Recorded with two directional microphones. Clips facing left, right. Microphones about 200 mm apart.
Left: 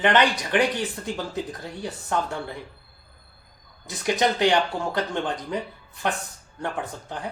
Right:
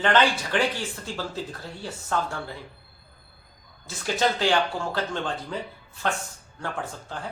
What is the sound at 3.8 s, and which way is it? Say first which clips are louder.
A woman's voice: left 2 dB; 20° left (ahead or behind).